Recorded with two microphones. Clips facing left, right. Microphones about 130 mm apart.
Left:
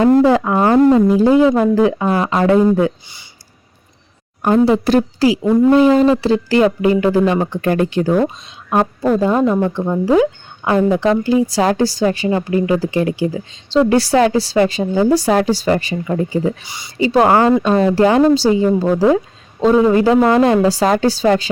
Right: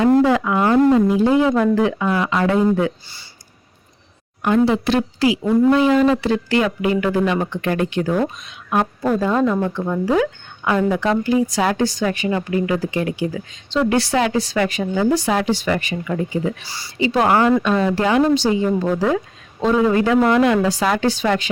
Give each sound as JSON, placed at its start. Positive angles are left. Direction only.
{"t": 0.2, "sound": "speech", "side_deg": 35}
{"t": 4.4, "sound": "a woman's voice", "side_deg": 35}
{"t": 16.6, "sound": "speech", "side_deg": 20}
{"t": 17.0, "sound": "speech", "side_deg": 35}